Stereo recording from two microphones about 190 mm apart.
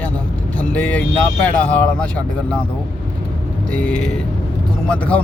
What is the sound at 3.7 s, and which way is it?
Speech, 5° left (ahead or behind).